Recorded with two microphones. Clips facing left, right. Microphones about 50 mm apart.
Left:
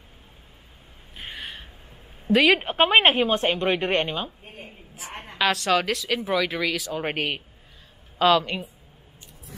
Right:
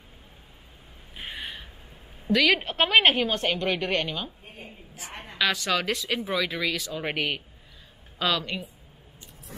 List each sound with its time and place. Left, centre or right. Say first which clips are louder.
1.1 s gasp: even; centre
2.3 s a woman's voice: left 4 dB; left
5.4 s speech: left 4 dB; centre
6.9 s a woman's voice: left 2 dB; left
8.2 s speech: left 8 dB; centre